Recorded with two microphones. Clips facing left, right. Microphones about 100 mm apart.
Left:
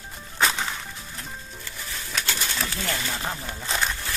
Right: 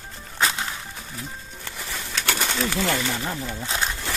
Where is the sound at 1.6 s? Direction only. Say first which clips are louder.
Right 3 dB; 75° right (ahead or behind).